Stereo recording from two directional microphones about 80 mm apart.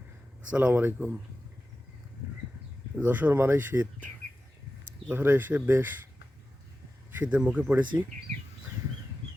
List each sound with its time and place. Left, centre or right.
0.5 s speech: right
2.9 s speech: right
7.2 s speech: centre